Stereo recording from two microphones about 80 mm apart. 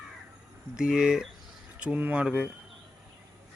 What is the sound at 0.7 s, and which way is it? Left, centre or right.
Speech, centre.